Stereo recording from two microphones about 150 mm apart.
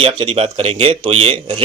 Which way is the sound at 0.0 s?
35° right (ahead or behind).